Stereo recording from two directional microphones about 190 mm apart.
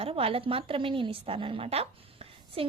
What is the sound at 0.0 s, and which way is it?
A woman's voice, 30° right (ahead or behind).